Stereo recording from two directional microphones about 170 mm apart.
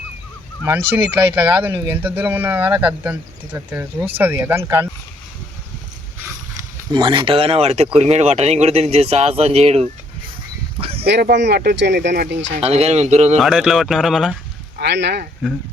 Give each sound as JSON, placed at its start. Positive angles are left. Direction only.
{"t": 0.6, "sound": "speech", "side_deg": -10}
{"t": 6.9, "sound": "speech", "side_deg": -30}
{"t": 10.8, "sound": "a sound", "side_deg": -35}
{"t": 11.0, "sound": "speech", "side_deg": -75}
{"t": 12.5, "sound": "speech", "side_deg": -40}
{"t": 13.4, "sound": "speech", "side_deg": 0}
{"t": 14.8, "sound": "speech", "side_deg": -90}